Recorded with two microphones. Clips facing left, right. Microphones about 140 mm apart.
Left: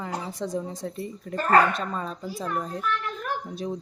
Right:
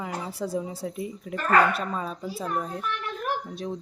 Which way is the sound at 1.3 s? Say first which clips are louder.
Left 3 dB; 35° left (ahead or behind).